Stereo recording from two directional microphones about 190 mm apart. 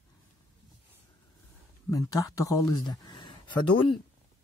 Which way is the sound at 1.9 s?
20° left (ahead or behind).